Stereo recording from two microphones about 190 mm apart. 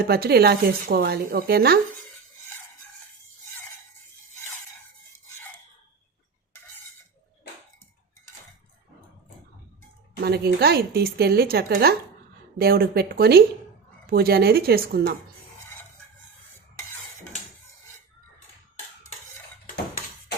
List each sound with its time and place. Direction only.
0.0 s speech: 55° right (ahead or behind)
10.2 s speech: 55° right (ahead or behind)